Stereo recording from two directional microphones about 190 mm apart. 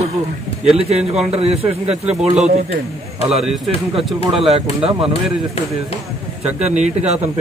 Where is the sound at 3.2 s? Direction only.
Centre (ahead or behind).